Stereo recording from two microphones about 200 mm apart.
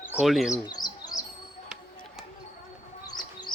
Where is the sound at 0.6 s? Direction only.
20° left (ahead or behind).